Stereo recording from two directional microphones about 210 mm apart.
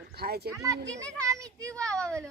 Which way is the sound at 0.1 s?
50° right (ahead or behind).